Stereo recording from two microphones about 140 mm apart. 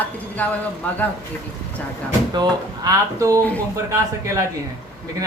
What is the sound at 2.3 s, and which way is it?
Speech, 30° right (ahead or behind).